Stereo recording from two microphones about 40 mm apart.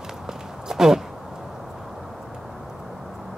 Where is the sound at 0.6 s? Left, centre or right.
Centre.